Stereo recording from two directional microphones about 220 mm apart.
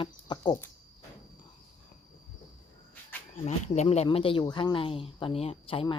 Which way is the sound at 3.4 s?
30° left (ahead or behind).